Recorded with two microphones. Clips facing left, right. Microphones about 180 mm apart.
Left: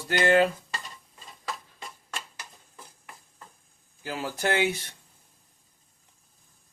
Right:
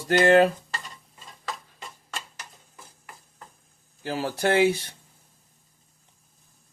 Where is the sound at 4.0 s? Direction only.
35° right (ahead or behind).